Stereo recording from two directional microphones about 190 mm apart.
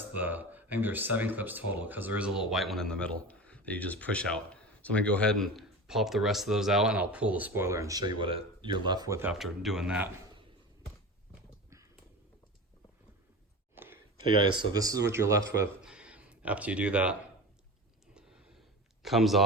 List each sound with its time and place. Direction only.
0.1 s speech: 10° right (ahead or behind)
9.3 s speech: centre (ahead or behind)
13.7 s a sound: 10° right (ahead or behind)
14.7 s speech: 20° right (ahead or behind)
15.8 s a sound: 5° right (ahead or behind)
19.0 s speech: centre (ahead or behind)